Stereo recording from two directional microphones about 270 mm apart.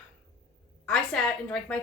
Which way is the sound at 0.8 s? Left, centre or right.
Centre.